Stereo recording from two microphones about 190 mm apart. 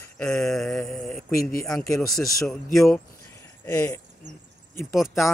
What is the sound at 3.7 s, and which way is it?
Speech, 15° left (ahead or behind).